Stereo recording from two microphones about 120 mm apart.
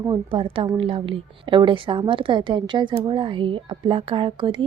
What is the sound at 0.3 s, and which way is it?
A woman's voice, 45° right (ahead or behind).